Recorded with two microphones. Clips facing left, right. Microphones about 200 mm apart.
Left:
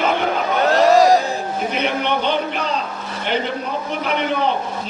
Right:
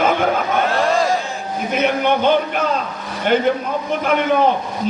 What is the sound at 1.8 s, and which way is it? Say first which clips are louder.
Speech: right 6 dB; 50° right (ahead or behind).